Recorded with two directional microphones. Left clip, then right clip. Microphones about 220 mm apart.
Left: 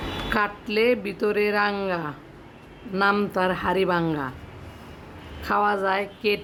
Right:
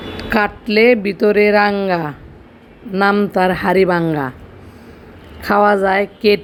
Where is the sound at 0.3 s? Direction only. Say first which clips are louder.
Right 9 dB; 20° right (ahead or behind).